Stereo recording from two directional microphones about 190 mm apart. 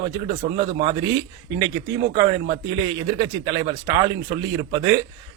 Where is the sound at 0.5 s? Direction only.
25° right (ahead or behind).